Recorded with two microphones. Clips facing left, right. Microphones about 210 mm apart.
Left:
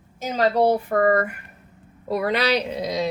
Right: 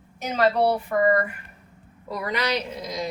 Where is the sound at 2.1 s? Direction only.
65° left (ahead or behind).